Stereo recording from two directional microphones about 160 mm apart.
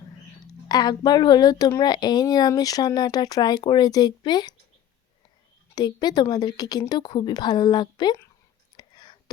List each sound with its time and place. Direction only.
0.7 s a woman's voice: 25° left (ahead or behind)
5.7 s a woman's voice: 25° left (ahead or behind)
8.7 s whispering: 25° left (ahead or behind)